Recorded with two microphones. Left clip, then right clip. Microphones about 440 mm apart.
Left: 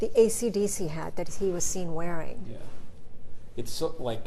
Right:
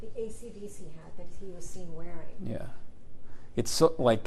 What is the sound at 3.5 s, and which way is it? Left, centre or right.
Speech, right.